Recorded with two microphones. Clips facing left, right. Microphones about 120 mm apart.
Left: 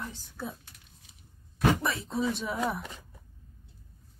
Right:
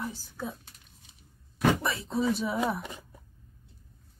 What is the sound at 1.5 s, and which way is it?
Speech, centre (ahead or behind).